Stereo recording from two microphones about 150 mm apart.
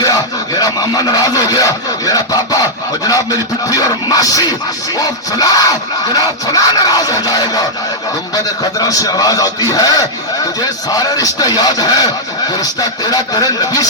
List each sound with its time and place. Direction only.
0.6 s speech: 25° left (ahead or behind)
8.8 s speech: 25° left (ahead or behind)
13.1 s speech: 25° left (ahead or behind)